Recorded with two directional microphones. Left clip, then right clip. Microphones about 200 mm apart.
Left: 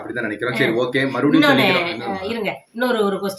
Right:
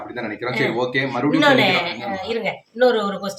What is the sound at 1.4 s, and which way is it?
A woman's voice, 10° right (ahead or behind).